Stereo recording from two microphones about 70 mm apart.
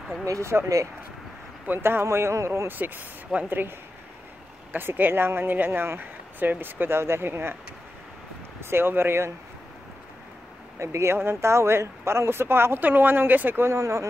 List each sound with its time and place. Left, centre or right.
0.2 s speech: right
1.7 s speech: right
2.7 s speech: right
4.7 s speech: right
8.6 s speech: right
10.8 s speech: right
13.7 s speech: right